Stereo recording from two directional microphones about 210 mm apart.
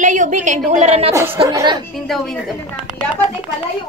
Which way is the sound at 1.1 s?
10° right (ahead or behind).